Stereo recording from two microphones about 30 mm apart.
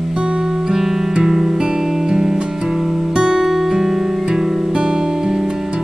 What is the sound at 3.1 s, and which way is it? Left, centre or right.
Music, right.